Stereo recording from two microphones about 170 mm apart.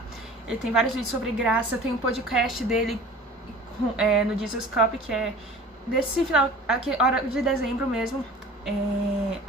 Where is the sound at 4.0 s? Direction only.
Centre (ahead or behind).